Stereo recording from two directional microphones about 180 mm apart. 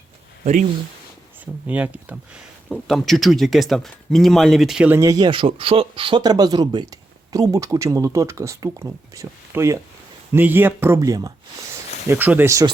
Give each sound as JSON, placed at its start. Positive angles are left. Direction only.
{"t": 1.6, "sound": "speech", "side_deg": -10}